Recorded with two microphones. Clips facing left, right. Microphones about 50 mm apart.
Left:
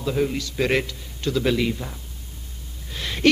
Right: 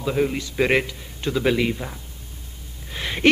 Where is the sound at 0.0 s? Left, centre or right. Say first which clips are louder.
Right 1 dB; centre.